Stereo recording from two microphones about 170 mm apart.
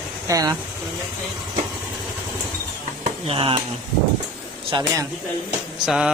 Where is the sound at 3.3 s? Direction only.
30° right (ahead or behind).